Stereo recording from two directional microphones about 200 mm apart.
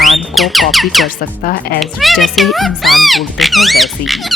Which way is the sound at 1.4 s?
50° left (ahead or behind).